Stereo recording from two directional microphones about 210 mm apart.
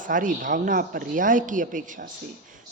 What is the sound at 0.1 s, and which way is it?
A man's voice, 40° right (ahead or behind).